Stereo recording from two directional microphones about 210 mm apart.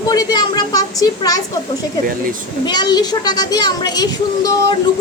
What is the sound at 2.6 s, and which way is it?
A woman's voice, 20° left (ahead or behind).